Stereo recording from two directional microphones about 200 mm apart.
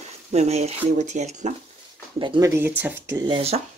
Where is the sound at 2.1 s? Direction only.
20° right (ahead or behind).